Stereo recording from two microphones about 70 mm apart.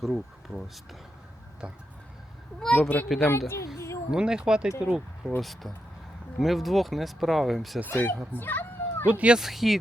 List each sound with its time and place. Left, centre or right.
0.0 s speech: centre
1.6 s speech: centre
2.6 s speech: centre
3.3 s speech: left
4.1 s speech: centre
5.4 s speech: centre
7.9 s speech: left
8.4 s cat: left
9.1 s speech: centre
9.4 s speech: centre